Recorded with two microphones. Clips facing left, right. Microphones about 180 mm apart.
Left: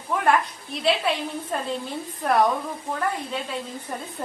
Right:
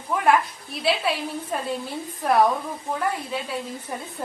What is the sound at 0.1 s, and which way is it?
A woman's voice, 5° right (ahead or behind).